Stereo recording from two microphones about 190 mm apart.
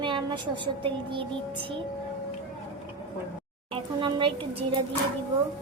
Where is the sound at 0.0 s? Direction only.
25° right (ahead or behind).